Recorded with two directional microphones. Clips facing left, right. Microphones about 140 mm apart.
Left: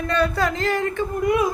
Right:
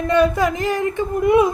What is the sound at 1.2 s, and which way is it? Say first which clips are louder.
Female singing: right 6 dB; 25° right (ahead or behind).